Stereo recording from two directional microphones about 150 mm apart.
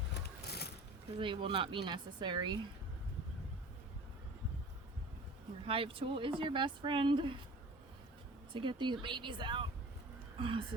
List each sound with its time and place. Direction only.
0.1 s a sound: 90° left
1.2 s speech: 35° right (ahead or behind)
5.6 s speech: 35° right (ahead or behind)
8.5 s speech: 30° right (ahead or behind)